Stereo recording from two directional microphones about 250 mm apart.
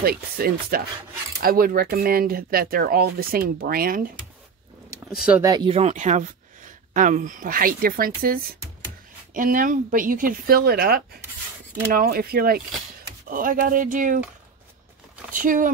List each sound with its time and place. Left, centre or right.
0.0 s speech: right
5.0 s speech: centre; by 14.2 s right
15.3 s speech: right